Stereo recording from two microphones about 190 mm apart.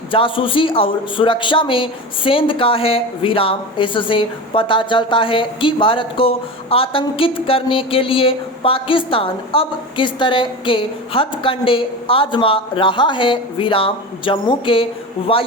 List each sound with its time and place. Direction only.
0.1 s speech: 25° left (ahead or behind)